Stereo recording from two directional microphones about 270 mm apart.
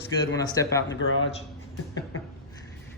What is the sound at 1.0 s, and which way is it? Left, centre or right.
Speech, left.